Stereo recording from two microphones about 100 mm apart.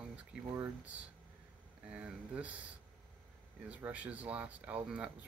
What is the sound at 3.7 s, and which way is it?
Speech, 15° right (ahead or behind).